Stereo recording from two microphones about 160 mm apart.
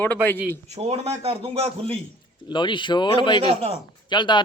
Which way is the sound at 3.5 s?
40° right (ahead or behind).